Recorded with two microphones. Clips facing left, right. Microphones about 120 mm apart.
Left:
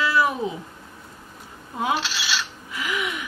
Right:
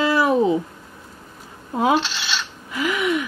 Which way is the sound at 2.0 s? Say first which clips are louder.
Even; 5° left (ahead or behind).